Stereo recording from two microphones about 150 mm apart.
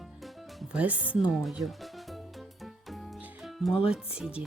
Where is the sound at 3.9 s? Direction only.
5° right (ahead or behind).